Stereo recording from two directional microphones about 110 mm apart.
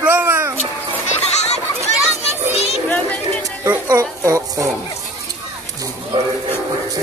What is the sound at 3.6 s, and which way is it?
Speech, 25° right (ahead or behind).